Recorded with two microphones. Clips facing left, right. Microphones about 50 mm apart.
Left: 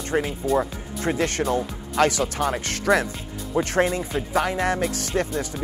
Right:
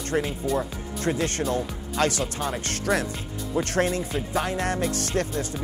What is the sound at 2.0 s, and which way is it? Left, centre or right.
Speech, left.